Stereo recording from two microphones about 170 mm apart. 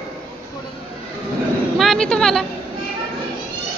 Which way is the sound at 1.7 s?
5° left (ahead or behind).